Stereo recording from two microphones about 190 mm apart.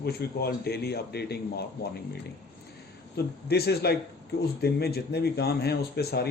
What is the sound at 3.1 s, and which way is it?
A man's voice, 60° left (ahead or behind).